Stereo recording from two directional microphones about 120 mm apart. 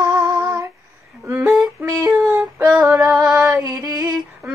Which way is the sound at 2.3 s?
20° right (ahead or behind).